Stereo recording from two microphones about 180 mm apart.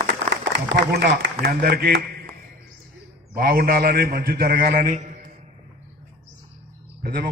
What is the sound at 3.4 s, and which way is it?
A man's voice, 55° right (ahead or behind).